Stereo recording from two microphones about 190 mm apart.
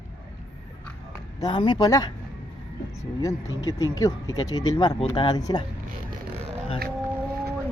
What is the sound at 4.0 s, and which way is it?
Speech, 15° left (ahead or behind).